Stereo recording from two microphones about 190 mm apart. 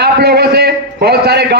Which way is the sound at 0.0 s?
55° right (ahead or behind).